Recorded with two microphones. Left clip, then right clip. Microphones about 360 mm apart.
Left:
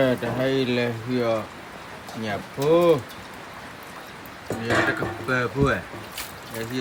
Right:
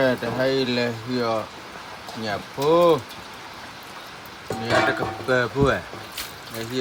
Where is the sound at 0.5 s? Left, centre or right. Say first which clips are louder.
Right 1 dB; right.